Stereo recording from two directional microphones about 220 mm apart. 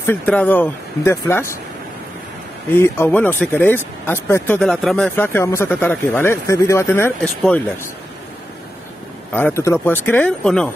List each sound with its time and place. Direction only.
0.0 s speech: 10° left (ahead or behind)
2.7 s speech: 10° left (ahead or behind)
9.3 s speech: 10° left (ahead or behind)